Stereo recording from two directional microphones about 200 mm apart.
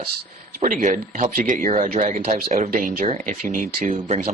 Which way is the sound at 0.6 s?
40° right (ahead or behind).